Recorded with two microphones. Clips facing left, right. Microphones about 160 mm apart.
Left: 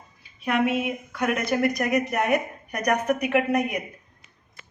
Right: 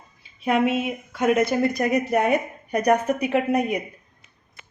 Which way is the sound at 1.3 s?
25° right (ahead or behind).